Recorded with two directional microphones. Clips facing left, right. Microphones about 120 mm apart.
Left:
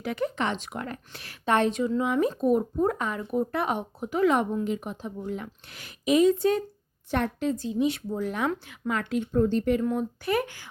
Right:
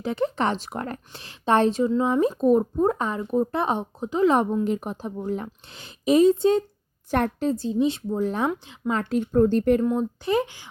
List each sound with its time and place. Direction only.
0.0 s speech: 30° right (ahead or behind)
1.1 s speech: 25° right (ahead or behind)
7.1 s speech: 40° right (ahead or behind)
8.4 s speech: 15° right (ahead or behind)
8.9 s speech: 35° right (ahead or behind)
9.8 s speech: 25° right (ahead or behind)